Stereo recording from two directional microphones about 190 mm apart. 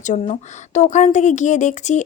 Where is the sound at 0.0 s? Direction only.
40° left (ahead or behind).